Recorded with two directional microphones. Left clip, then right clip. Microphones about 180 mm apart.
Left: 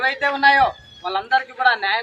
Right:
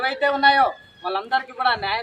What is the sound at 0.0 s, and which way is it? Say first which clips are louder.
A man's voice: left 1 dB; 5° right (ahead or behind).